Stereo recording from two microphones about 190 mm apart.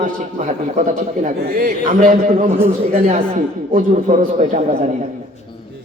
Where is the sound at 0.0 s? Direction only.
40° right (ahead or behind).